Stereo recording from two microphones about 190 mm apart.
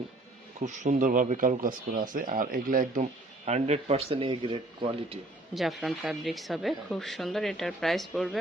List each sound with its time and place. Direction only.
0.6 s speech: 40° right (ahead or behind)
5.5 s a woman's voice: centre (ahead or behind)